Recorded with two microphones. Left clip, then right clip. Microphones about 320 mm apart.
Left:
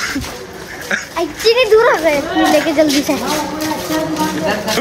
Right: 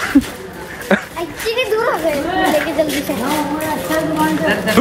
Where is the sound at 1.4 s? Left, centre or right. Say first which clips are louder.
Left 7 dB; left.